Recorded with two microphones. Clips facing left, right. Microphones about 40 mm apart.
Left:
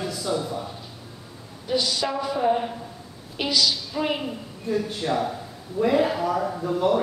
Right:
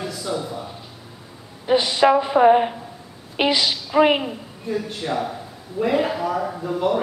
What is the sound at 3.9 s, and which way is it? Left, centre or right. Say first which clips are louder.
Speech: right 10 dB; right.